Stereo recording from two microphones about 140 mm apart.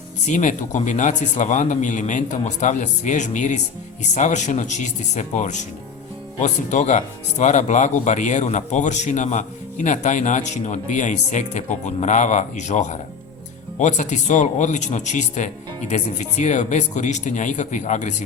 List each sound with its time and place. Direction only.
0.3 s speech: 60° left (ahead or behind)